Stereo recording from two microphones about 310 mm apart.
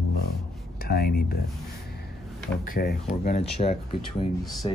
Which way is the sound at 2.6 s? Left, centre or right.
Left.